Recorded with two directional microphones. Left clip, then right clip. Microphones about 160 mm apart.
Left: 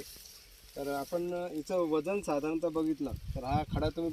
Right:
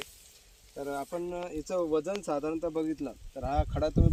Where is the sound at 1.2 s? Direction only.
45° left (ahead or behind).